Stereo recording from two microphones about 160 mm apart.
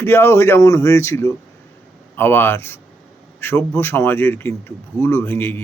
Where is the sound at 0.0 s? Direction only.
15° left (ahead or behind).